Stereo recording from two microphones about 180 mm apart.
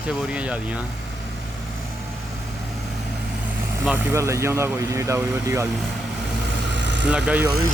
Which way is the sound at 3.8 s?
10° right (ahead or behind).